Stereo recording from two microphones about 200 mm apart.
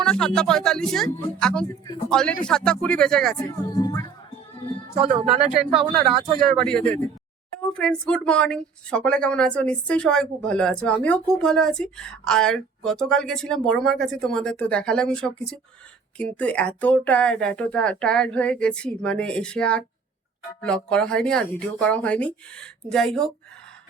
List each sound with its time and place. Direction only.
0.0 s speech: 5° left (ahead or behind)
3.4 s speech: 20° left (ahead or behind)
4.9 s speech: 30° right (ahead or behind)
5.3 s speech: 5° right (ahead or behind)